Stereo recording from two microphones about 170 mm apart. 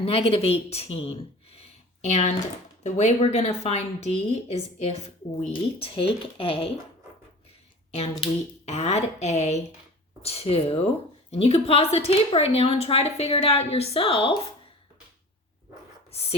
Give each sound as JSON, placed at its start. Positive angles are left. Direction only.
{"t": 0.0, "sound": "a woman's voice", "side_deg": 35}
{"t": 7.9, "sound": "a woman's voice", "side_deg": 35}